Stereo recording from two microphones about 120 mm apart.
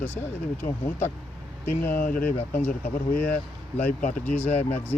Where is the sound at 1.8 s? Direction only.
15° left (ahead or behind).